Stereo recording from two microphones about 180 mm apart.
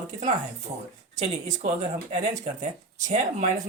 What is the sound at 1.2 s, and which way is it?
Speech, 40° right (ahead or behind).